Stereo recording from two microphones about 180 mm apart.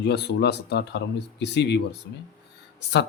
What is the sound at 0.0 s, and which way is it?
A man's voice, 65° left (ahead or behind).